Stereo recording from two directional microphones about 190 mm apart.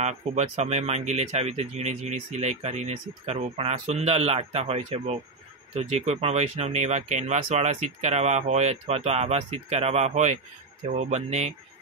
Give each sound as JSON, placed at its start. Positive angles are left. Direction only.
{"t": 0.0, "sound": "speech", "side_deg": -35}